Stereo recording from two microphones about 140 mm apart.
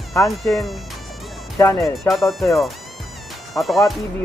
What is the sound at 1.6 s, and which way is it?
Speech, 20° left (ahead or behind).